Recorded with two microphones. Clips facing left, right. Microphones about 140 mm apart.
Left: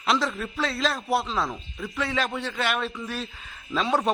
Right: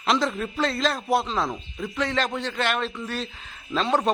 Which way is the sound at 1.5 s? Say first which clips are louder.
Right 3 dB; 20° right (ahead or behind).